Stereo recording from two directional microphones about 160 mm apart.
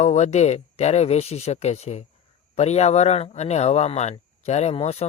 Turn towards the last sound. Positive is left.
turn(degrees=40)  # may be behind; listen again after turning